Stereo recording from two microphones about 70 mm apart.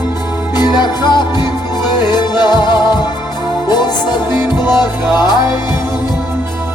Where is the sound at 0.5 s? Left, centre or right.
Left.